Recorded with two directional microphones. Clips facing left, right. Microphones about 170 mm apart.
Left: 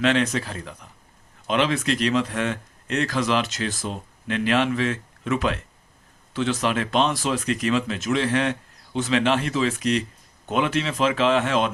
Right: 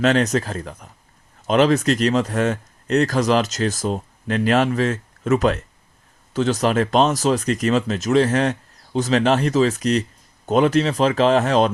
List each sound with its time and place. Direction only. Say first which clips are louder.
0.0 s speech: right 4 dB; 40° right (ahead or behind)